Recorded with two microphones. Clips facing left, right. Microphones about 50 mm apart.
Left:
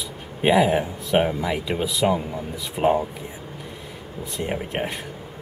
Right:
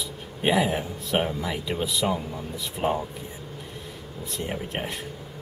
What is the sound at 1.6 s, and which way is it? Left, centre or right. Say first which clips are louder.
Speech: left 3 dB; centre.